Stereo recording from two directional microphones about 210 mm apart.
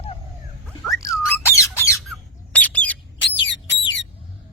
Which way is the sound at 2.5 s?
5° left (ahead or behind).